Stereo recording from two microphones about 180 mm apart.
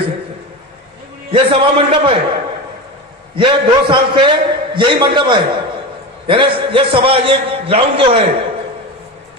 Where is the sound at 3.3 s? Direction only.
30° right (ahead or behind).